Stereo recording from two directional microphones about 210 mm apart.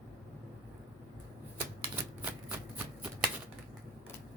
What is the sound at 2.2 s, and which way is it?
Shuffling cards, 10° right (ahead or behind).